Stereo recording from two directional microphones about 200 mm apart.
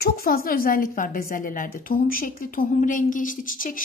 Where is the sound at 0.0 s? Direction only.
50° left (ahead or behind).